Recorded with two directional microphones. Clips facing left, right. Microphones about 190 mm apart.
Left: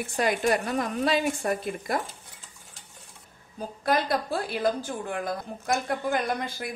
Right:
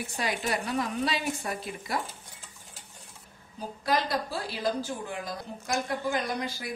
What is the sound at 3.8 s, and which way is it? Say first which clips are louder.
A woman's voice: left 3 dB; 50° left (ahead or behind).